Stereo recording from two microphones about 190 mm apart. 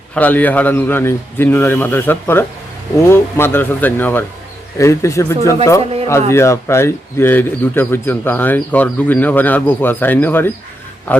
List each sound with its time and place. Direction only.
0.1 s a man's voice: 10° left (ahead or behind)